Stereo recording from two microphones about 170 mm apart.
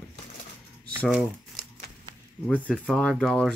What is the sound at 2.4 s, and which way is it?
Speech, 5° left (ahead or behind).